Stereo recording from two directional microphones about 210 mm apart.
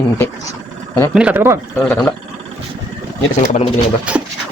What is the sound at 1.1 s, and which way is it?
Speech, 10° right (ahead or behind).